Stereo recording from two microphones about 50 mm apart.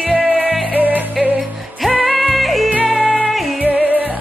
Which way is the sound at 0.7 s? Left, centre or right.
Right.